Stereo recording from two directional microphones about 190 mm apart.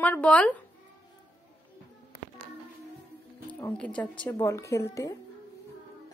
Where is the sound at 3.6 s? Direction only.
5° left (ahead or behind).